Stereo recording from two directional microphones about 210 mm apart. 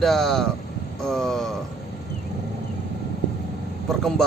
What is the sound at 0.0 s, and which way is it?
Speech, centre (ahead or behind).